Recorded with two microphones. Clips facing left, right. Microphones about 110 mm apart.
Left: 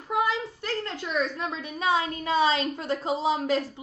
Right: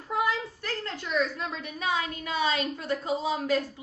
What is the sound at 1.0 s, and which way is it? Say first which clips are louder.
A woman's voice: right 1 dB; 25° left (ahead or behind).